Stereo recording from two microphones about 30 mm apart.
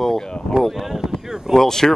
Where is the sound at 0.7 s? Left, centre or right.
Centre.